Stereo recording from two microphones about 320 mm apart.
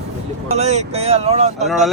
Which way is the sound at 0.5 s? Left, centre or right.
Right.